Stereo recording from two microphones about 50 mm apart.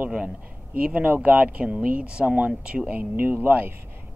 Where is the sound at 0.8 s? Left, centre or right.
Right.